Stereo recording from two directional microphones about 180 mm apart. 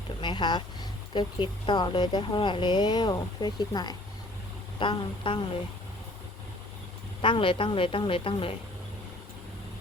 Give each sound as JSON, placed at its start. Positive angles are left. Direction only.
{"t": 0.2, "sound": "speech", "side_deg": 25}
{"t": 7.2, "sound": "speech", "side_deg": 30}